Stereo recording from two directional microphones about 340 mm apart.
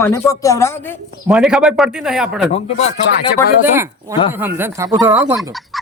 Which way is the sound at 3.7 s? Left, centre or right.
Centre.